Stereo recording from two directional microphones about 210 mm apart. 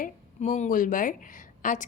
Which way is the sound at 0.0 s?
35° left (ahead or behind).